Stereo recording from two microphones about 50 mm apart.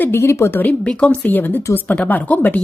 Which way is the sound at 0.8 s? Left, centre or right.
Left.